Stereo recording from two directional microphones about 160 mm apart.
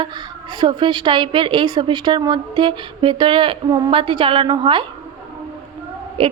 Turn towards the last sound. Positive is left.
turn(degrees=-35)  # may be behind; listen again after turning